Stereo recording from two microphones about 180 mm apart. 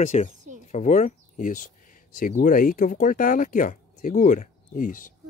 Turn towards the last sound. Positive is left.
turn(degrees=45)  # may be behind; listen again after turning